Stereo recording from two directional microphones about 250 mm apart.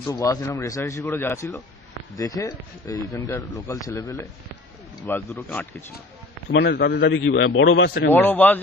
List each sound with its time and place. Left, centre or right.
0.0 s speech: centre
6.5 s a man's voice: left
8.1 s speech: centre